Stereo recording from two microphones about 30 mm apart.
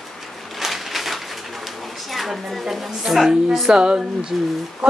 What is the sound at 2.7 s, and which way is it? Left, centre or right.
A woman's voice, centre.